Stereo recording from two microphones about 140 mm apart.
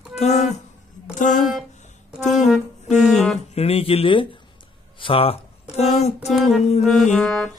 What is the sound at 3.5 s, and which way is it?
Speech, 45° left (ahead or behind).